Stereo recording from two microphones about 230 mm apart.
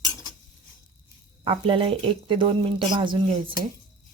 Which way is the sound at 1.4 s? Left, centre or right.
Right.